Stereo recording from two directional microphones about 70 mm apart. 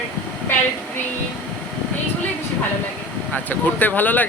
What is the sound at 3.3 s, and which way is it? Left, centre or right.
Speech, left.